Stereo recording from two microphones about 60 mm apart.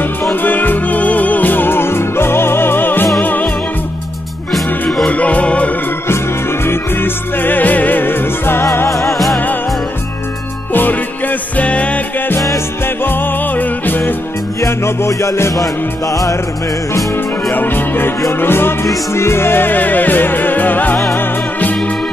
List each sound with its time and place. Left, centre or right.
0.2 s music: left
5.0 s music: left
6.6 s music: left
8.7 s music: left
10.7 s music: left
11.5 s music: left
13.0 s music: left
14.6 s music: left
16.1 s music: left
17.5 s music: left